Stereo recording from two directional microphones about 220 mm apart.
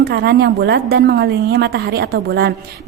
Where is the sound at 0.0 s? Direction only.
45° right (ahead or behind).